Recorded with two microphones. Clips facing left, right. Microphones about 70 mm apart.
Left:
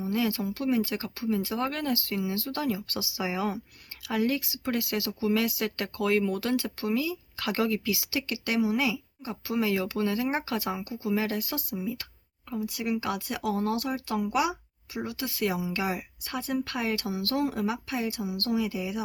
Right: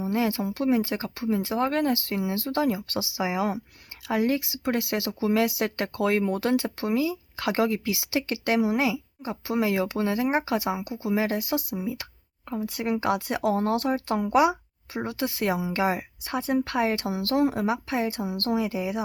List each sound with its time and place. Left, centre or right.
0.0 s speech: right
12.5 s speech: right